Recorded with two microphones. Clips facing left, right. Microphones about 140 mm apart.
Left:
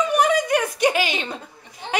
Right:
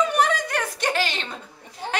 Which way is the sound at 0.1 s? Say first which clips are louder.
Left 4 dB; 15° left (ahead or behind).